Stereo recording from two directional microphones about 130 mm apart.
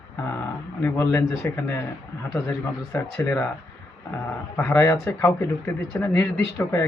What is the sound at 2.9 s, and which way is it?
Speech, 20° left (ahead or behind).